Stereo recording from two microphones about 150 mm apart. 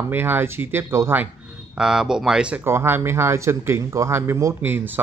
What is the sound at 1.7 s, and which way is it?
Speech, 5° right (ahead or behind).